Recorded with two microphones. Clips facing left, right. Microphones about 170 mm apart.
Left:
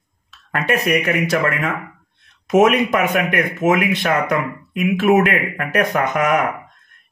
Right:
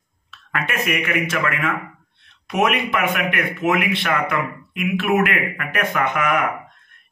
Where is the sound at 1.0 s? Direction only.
40° left (ahead or behind).